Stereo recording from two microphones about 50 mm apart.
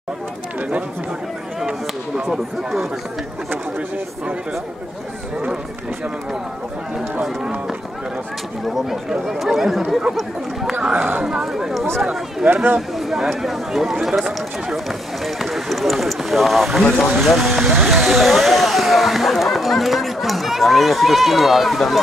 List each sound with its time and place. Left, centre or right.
2.2 s speech: centre
9.2 s speech: centre
10.7 s speech: centre
12.7 s a sound: centre
13.4 s speech: centre